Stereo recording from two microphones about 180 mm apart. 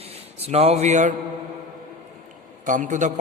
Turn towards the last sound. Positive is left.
turn(degrees=-45)  # may be behind; listen again after turning